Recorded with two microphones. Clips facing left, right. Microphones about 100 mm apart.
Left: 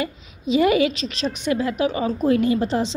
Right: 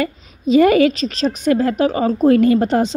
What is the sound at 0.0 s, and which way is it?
A woman's voice, 45° right (ahead or behind).